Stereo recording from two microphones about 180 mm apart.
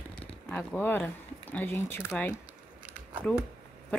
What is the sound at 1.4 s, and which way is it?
Speech, 10° left (ahead or behind).